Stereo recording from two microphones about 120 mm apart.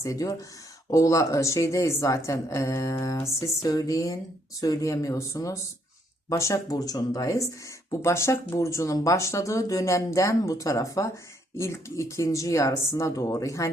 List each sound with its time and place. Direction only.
0.0 s a woman's voice: 30° left (ahead or behind)